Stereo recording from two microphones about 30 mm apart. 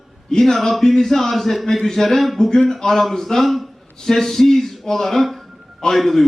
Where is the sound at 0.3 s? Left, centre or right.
Centre.